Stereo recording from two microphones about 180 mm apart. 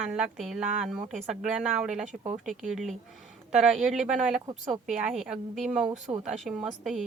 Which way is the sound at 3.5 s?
Centre (ahead or behind).